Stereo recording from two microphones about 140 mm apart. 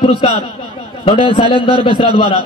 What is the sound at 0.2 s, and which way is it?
A man's voice, 40° left (ahead or behind).